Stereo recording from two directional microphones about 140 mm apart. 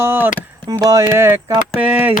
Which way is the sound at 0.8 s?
25° right (ahead or behind).